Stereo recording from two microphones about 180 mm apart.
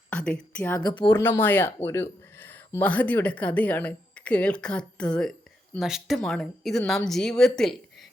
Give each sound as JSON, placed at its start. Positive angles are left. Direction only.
{"t": 0.1, "sound": "a woman's voice", "side_deg": 5}
{"t": 0.8, "sound": "speech", "side_deg": 25}
{"t": 1.1, "sound": "speech", "side_deg": 10}